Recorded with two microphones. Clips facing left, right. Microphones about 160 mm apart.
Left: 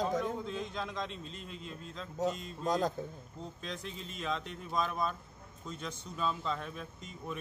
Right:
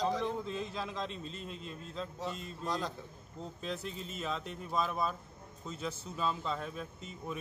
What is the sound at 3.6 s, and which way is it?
Speech, 5° right (ahead or behind).